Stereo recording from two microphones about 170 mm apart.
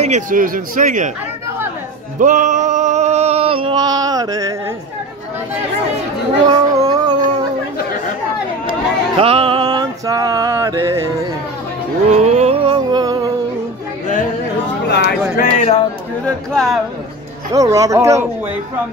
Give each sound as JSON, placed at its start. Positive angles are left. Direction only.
{"t": 0.0, "sound": "speech", "side_deg": -45}
{"t": 2.1, "sound": "a sound", "side_deg": -50}
{"t": 6.4, "sound": "cat", "side_deg": -25}
{"t": 9.2, "sound": "music", "side_deg": -35}
{"t": 12.1, "sound": "music", "side_deg": -40}
{"t": 14.9, "sound": "a sound", "side_deg": 80}
{"t": 15.3, "sound": "speech", "side_deg": 45}
{"t": 16.5, "sound": "speech", "side_deg": 0}
{"t": 17.6, "sound": "speech", "side_deg": -20}